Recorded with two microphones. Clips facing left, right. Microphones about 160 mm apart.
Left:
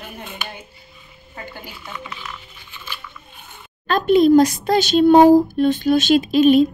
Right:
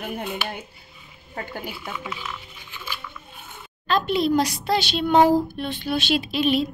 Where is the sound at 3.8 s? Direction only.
50° left (ahead or behind).